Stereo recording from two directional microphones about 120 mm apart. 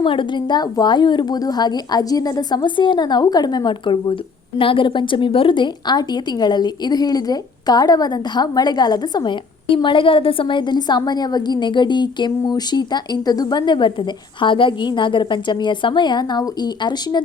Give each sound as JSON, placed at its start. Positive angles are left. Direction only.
{"t": 0.0, "sound": "a woman's voice", "side_deg": 45}